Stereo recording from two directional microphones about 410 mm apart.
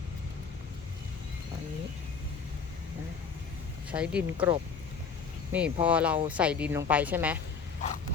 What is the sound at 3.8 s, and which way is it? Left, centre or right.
Speech, centre.